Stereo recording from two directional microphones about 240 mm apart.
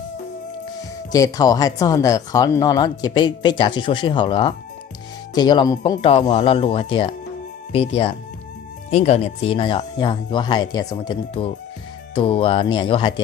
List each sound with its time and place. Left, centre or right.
1.1 s speech: centre